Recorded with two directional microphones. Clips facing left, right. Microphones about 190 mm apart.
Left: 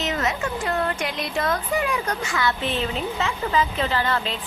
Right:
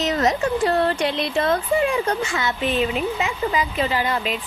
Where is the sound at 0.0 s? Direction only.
35° right (ahead or behind).